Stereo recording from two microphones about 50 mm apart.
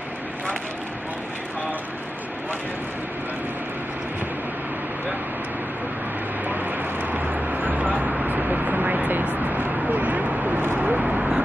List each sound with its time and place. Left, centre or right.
6.4 s vehicle: right
9.2 s a sound: right
10.9 s vehicle: centre